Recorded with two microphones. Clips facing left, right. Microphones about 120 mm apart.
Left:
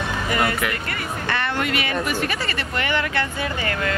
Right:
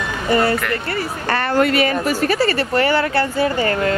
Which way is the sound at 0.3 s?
30° right (ahead or behind).